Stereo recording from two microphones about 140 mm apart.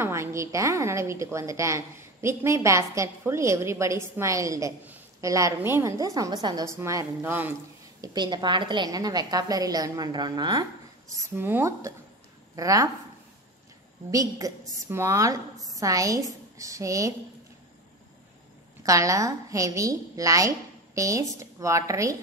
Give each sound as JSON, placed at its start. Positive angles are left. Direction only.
{"t": 0.0, "sound": "a woman's voice", "side_deg": -20}
{"t": 8.0, "sound": "a woman's voice", "side_deg": -30}
{"t": 11.3, "sound": "a woman's voice", "side_deg": -15}
{"t": 14.1, "sound": "a woman's voice", "side_deg": -25}
{"t": 18.8, "sound": "a woman's voice", "side_deg": -25}